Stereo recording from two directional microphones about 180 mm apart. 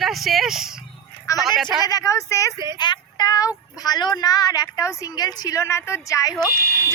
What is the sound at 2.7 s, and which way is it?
Child singing, 25° left (ahead or behind).